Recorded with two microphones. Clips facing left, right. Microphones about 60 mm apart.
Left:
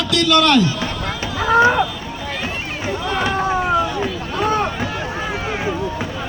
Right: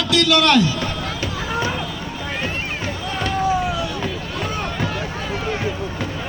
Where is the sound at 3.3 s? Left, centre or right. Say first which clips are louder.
Left 1 dB; left.